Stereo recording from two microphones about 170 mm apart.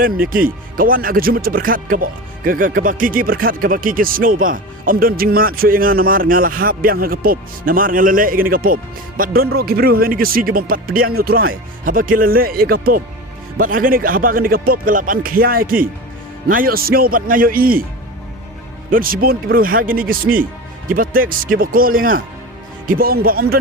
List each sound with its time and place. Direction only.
0.0 s speech: 55° right (ahead or behind)
18.9 s speech: 55° right (ahead or behind)